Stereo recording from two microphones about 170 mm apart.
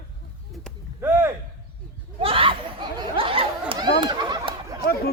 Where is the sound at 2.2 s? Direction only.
30° right (ahead or behind).